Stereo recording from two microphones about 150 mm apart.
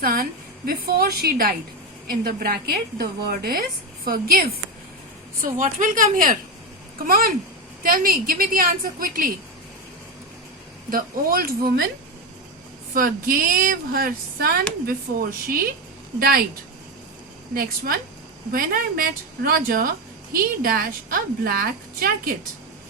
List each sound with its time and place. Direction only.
0.0 s a woman's voice: 75° right (ahead or behind)
5.4 s a woman's voice: 60° right (ahead or behind)
10.8 s a woman's voice: 80° right
12.9 s speech: 70° right (ahead or behind)
17.5 s a woman's voice: 80° right